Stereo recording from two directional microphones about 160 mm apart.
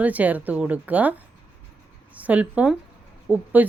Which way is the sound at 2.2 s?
10° right (ahead or behind).